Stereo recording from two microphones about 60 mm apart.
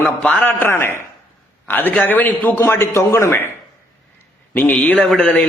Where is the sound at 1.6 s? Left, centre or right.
Left.